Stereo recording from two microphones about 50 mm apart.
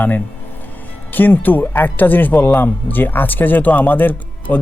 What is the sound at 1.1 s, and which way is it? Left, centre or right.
Speech, left.